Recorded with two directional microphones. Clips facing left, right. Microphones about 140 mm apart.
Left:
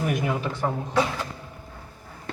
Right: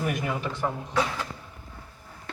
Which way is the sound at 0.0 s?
5° left (ahead or behind).